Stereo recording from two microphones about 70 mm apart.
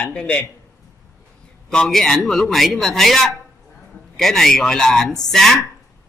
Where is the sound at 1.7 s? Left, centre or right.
Centre.